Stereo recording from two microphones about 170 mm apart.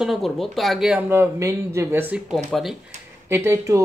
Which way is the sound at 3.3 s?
15° right (ahead or behind).